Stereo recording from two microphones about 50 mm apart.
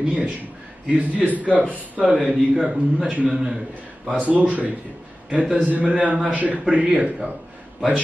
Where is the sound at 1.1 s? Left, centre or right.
Right.